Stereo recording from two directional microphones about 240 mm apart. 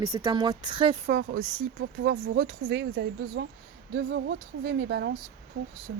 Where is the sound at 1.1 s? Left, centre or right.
Right.